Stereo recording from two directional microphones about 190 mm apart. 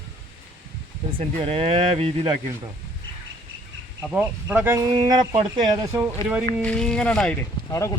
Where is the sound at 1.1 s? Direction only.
30° right (ahead or behind).